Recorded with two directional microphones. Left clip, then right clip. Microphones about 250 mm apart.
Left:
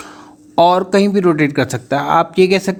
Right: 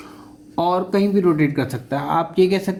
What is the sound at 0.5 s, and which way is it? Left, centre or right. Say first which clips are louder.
Speech: left 8 dB; left.